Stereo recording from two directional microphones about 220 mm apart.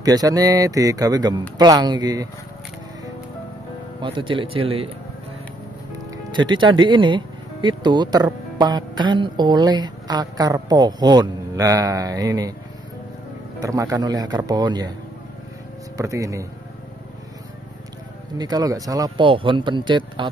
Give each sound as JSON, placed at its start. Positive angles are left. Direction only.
{"t": 0.0, "sound": "speech", "side_deg": -15}
{"t": 4.0, "sound": "speech", "side_deg": -20}
{"t": 6.3, "sound": "speech", "side_deg": -20}
{"t": 13.6, "sound": "speech", "side_deg": -15}
{"t": 16.0, "sound": "speech", "side_deg": -15}
{"t": 18.4, "sound": "speech", "side_deg": -15}